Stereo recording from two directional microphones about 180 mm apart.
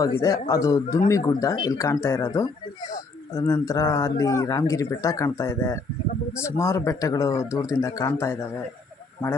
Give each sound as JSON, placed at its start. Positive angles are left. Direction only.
{"t": 0.0, "sound": "speech", "side_deg": 20}